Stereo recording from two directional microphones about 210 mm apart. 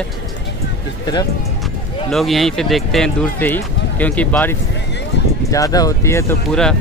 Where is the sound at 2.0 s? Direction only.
Centre (ahead or behind).